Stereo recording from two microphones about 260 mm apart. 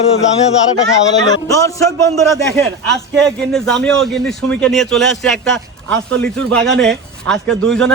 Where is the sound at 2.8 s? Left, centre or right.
Centre.